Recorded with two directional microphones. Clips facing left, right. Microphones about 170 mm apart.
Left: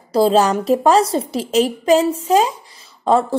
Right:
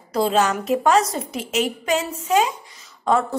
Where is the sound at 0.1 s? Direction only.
30° left (ahead or behind).